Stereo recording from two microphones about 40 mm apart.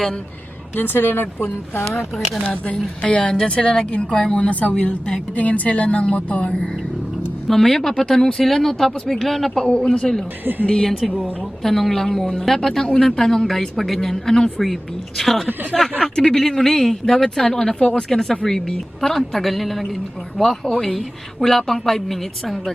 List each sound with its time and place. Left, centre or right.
0.8 s speech: left
2.1 s a woman's voice: centre
3.0 s a woman's voice: left
4.4 s a woman's voice: left
6.0 s a woman's voice: left
7.4 s a woman's voice: centre
9.6 s a woman's voice: centre
11.6 s a woman's voice: centre
16.0 s a woman's voice: left
16.3 s a woman's voice: centre